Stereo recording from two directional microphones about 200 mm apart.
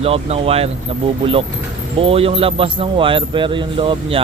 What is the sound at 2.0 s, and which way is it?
Speech, 30° right (ahead or behind).